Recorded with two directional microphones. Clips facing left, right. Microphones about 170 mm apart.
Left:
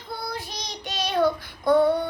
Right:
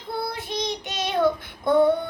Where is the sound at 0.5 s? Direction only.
20° right (ahead or behind).